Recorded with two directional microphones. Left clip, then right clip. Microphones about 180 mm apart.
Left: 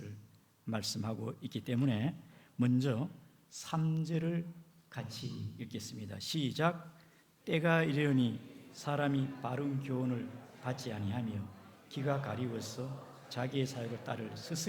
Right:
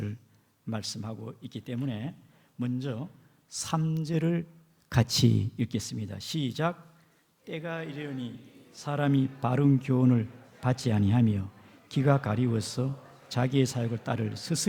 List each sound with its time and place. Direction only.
0.7 s speech: 10° right (ahead or behind)
3.6 s speech: 20° right (ahead or behind)
4.9 s speech: 45° right (ahead or behind)
5.6 s speech: 30° right (ahead or behind)
7.4 s speech: 10° left (ahead or behind)
8.7 s speech: 15° right (ahead or behind)